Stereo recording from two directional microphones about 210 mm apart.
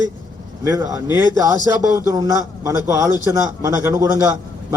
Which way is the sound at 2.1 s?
15° right (ahead or behind).